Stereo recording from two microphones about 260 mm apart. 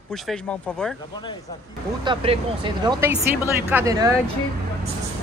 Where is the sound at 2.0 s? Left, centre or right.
Centre.